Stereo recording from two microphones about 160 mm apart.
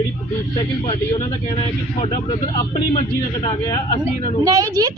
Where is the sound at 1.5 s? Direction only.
40° left (ahead or behind).